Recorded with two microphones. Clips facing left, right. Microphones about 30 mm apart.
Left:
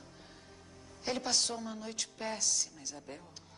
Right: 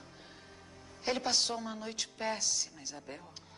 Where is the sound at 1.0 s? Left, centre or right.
Centre.